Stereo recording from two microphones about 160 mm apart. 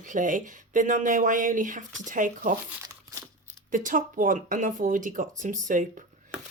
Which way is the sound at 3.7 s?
55° right (ahead or behind).